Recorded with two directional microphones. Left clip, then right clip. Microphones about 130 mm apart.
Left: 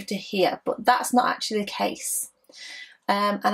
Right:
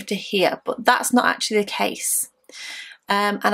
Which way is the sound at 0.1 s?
35° right (ahead or behind).